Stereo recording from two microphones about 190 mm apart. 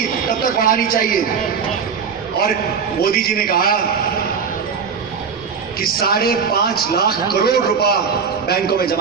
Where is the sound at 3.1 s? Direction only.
50° left (ahead or behind).